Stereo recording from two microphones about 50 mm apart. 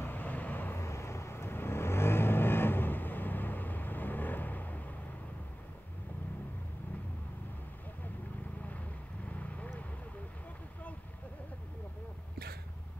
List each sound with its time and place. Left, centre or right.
0.0 s vehicle: left
0.7 s vehicle: left
9.3 s vehicle: left